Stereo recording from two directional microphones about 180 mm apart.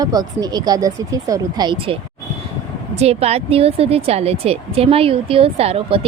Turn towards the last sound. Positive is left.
turn(degrees=-30)  # may be behind; listen again after turning